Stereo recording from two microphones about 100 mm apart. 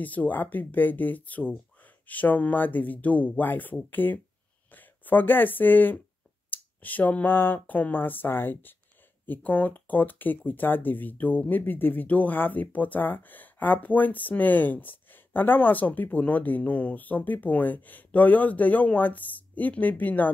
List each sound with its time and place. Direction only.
0.0 s speech: 15° left (ahead or behind)